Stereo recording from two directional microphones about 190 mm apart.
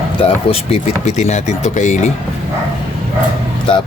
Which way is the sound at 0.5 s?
35° left (ahead or behind).